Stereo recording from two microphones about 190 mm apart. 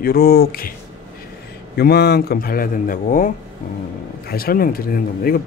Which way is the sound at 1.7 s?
60° left (ahead or behind).